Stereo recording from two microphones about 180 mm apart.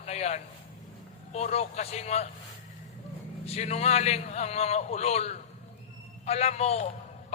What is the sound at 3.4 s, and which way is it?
A man's voice, 35° left (ahead or behind).